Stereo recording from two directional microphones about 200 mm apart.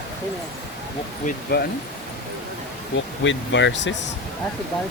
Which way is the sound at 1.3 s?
50° left (ahead or behind).